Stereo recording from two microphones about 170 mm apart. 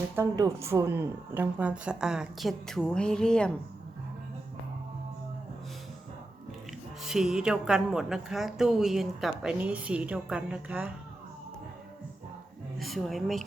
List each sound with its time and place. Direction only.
0.2 s a woman's voice: 15° right (ahead or behind); by 3.5 s 5° left (ahead or behind)
7.0 s a woman's voice: 5° right (ahead or behind)
12.8 s a woman's voice: centre (ahead or behind)